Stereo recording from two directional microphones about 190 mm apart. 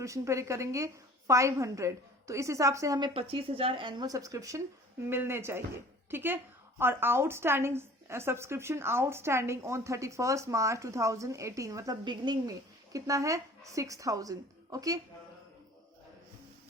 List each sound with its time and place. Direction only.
0.0 s a woman's voice: 15° right (ahead or behind)